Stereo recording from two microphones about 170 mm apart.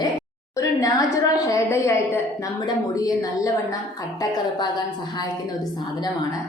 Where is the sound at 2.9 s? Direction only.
20° left (ahead or behind).